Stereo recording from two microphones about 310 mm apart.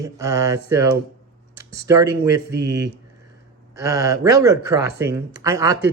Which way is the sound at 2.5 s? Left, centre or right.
Right.